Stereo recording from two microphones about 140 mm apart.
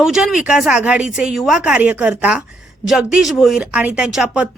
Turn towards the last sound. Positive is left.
turn(degrees=-5)  # may be behind; listen again after turning